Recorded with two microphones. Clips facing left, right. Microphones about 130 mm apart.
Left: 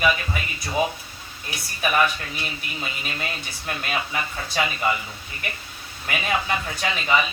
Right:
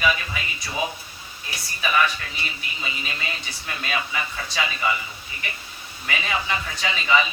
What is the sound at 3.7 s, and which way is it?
Speech, 45° left (ahead or behind).